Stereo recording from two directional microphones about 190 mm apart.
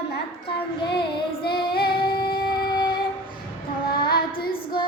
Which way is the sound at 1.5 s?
55° left (ahead or behind).